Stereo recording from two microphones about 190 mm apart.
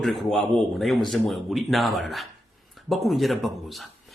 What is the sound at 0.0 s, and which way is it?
Speech, centre (ahead or behind).